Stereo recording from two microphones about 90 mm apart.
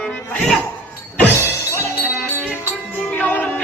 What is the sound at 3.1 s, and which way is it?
Music, 20° left (ahead or behind).